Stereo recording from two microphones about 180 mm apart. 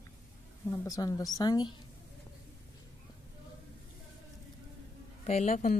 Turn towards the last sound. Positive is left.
turn(degrees=45)  # may be behind; listen again after turning